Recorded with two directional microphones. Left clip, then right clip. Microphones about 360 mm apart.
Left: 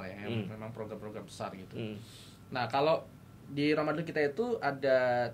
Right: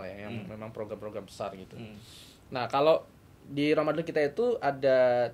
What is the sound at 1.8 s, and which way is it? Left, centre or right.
Speech, left.